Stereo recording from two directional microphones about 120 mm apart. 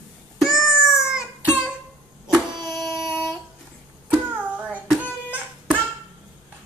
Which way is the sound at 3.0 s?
5° right (ahead or behind).